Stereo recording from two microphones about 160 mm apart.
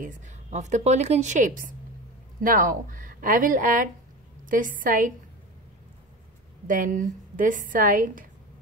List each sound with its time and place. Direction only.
0.0 s a woman's voice: 50° right (ahead or behind)
6.7 s a woman's voice: 55° right (ahead or behind)